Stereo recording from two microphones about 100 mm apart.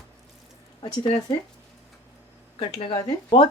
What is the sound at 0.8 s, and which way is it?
Speech, 65° left (ahead or behind).